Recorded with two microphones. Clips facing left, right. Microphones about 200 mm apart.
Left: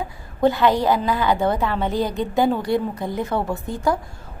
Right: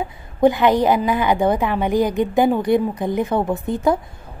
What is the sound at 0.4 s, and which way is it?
A woman's voice, 15° right (ahead or behind).